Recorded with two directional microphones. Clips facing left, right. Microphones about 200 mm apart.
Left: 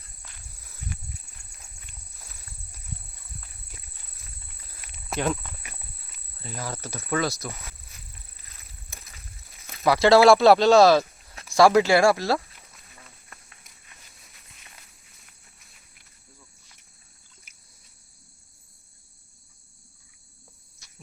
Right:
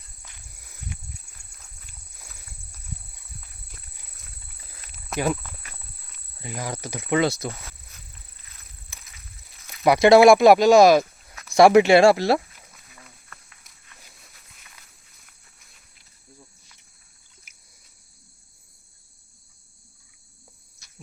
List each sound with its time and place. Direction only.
4.9 s cricket: 5° right (ahead or behind)
5.6 s horse: 10° left (ahead or behind)
6.4 s speech: 15° right (ahead or behind)
9.8 s speech: 20° right (ahead or behind)